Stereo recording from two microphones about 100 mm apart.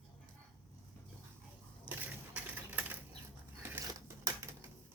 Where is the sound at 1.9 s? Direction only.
15° right (ahead or behind).